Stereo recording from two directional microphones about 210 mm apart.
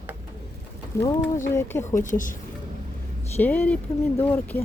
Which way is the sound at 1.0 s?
15° left (ahead or behind).